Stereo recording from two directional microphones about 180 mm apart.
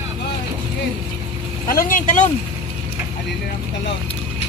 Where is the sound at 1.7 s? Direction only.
50° left (ahead or behind).